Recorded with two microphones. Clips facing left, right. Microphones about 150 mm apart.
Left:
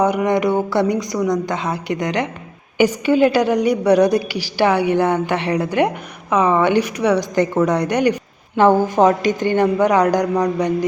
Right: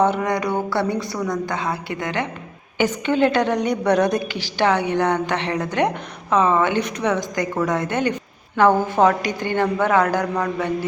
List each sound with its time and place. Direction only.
0.0 s a woman's voice: 15° left (ahead or behind)